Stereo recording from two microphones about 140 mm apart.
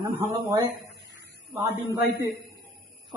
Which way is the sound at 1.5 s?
15° right (ahead or behind).